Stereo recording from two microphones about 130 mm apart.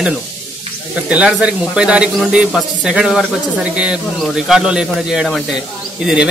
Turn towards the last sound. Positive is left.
turn(degrees=-5)  # may be behind; listen again after turning